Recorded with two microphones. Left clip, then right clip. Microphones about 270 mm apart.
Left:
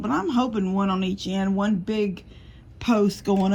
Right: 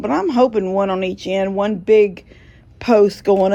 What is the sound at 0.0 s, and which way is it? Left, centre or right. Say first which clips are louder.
Speech: right 9 dB; right.